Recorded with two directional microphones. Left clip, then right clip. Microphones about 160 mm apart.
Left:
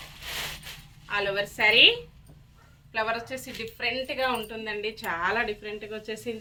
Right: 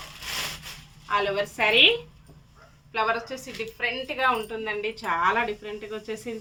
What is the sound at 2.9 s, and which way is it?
A woman's voice, centre (ahead or behind).